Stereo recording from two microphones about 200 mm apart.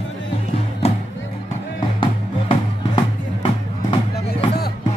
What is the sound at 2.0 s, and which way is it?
Music, 25° left (ahead or behind).